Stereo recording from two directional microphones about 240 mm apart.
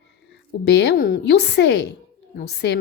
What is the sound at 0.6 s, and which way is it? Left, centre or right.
A woman's voice, left.